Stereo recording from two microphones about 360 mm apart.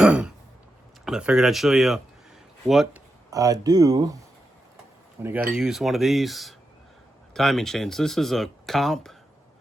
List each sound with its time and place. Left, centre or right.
0.0 s throat clearing: centre
1.0 s speech: centre
5.2 s speech: centre